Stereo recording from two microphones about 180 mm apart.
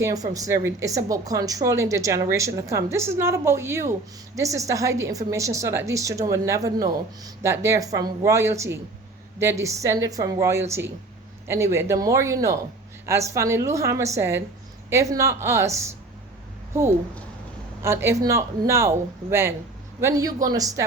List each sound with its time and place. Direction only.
0.0 s a woman's voice: 20° right (ahead or behind)
17.8 s a woman's voice: 15° right (ahead or behind)